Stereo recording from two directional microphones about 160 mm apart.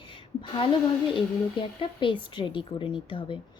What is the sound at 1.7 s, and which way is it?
A woman's voice, 30° left (ahead or behind).